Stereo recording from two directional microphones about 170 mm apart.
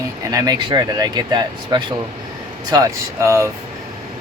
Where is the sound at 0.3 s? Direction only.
20° right (ahead or behind).